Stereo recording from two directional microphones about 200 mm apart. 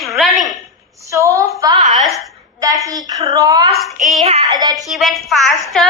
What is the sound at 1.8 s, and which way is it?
Speech, centre (ahead or behind).